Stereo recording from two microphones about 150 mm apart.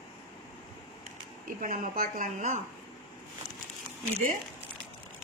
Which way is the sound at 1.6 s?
60° right (ahead or behind).